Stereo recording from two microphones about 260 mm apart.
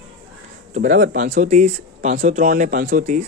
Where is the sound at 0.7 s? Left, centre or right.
Right.